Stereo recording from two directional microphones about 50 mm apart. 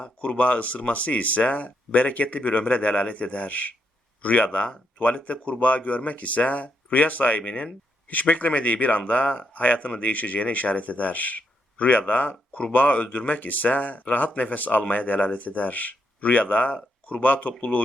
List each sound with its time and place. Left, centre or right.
0.0 s a man's voice: left